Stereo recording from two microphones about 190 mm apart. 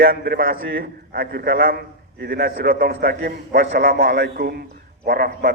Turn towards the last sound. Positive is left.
turn(degrees=-50)  # may be behind; listen again after turning